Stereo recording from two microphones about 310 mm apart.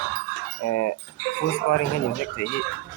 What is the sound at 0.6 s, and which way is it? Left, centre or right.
Speech, left.